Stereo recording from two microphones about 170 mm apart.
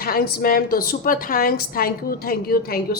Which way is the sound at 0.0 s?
65° left (ahead or behind).